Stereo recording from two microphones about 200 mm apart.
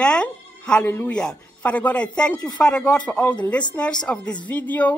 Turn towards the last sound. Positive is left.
turn(degrees=5)  # may be behind; listen again after turning